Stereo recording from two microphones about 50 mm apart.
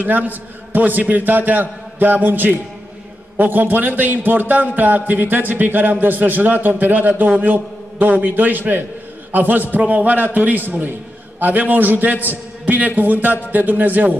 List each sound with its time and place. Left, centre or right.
0.0 s a man's voice: right